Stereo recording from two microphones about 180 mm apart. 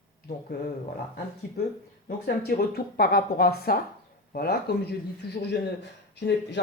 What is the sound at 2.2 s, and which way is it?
Speech, 60° left (ahead or behind).